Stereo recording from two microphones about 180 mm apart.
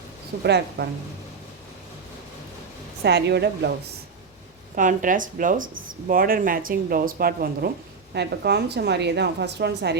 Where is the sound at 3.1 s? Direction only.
70° right (ahead or behind).